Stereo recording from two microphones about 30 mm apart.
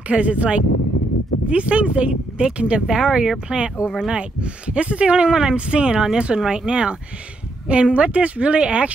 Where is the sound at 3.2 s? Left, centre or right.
Right.